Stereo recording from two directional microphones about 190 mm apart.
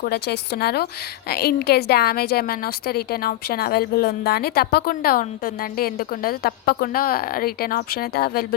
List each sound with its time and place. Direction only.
0.0 s a woman's voice: 55° left (ahead or behind)